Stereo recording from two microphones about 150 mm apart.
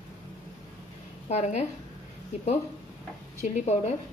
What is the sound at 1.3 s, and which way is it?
Speech, 45° left (ahead or behind).